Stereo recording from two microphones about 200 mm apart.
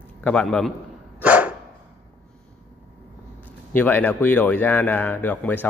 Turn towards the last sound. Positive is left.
turn(degrees=10)  # may be behind; listen again after turning